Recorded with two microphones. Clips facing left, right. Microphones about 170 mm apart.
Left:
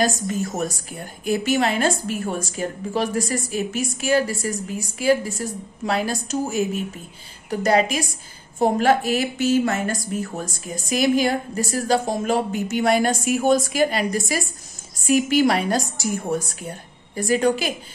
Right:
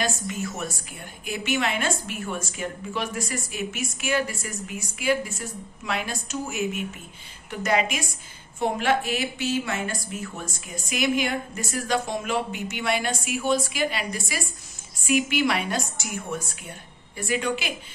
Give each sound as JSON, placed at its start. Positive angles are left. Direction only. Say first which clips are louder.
{"t": 0.0, "sound": "a woman's voice", "louder": "left 6 dB", "side_deg": 40}